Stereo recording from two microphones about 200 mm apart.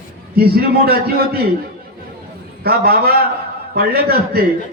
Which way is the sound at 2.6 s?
50° right (ahead or behind).